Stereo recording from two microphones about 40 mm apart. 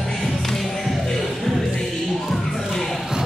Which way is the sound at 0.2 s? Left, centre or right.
Centre.